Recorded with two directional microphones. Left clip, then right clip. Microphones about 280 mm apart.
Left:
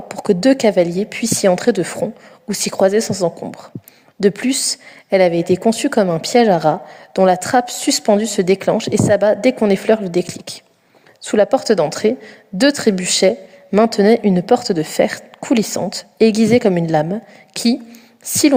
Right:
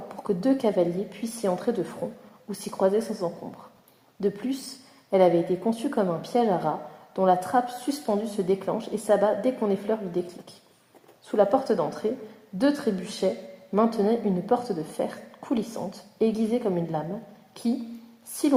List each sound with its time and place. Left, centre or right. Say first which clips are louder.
0.1 s a woman's voice: left 12 dB; left